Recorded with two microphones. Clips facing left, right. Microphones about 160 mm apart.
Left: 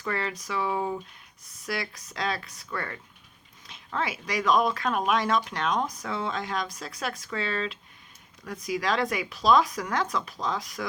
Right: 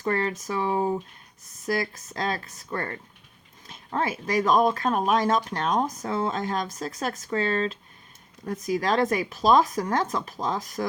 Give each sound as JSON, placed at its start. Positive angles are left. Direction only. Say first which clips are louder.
{"t": 0.0, "sound": "speech", "louder": "right 5 dB", "side_deg": -40}